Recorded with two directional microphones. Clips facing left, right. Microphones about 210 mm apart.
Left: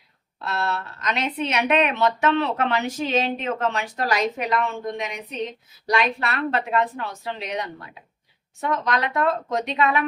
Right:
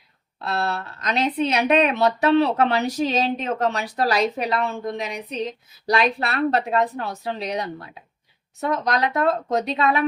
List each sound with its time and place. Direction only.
0.4 s speech: 35° right (ahead or behind)